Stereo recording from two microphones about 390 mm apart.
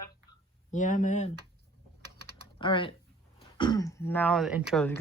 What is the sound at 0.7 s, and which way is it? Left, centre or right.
Speech, centre.